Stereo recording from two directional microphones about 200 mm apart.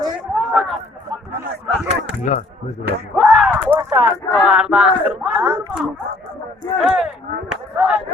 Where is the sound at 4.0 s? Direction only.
10° right (ahead or behind).